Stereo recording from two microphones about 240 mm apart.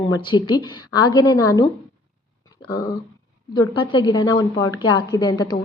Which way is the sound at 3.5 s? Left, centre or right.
Centre.